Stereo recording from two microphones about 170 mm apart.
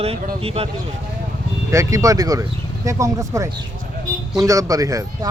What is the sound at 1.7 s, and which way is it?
Speech, 20° right (ahead or behind).